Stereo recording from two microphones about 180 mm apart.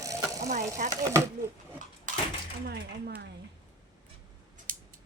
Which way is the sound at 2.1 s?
45° right (ahead or behind).